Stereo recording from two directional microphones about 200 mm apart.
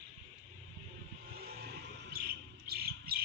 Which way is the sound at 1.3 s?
50° right (ahead or behind).